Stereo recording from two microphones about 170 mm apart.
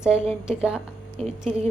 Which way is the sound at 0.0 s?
5° right (ahead or behind).